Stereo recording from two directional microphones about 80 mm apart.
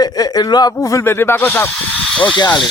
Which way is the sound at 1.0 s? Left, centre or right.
Left.